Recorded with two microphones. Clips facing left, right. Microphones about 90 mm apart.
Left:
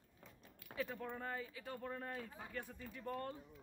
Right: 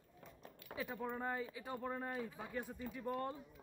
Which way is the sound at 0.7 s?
10° right (ahead or behind).